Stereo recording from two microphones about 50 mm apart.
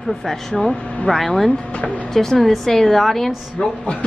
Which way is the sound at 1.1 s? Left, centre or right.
Centre.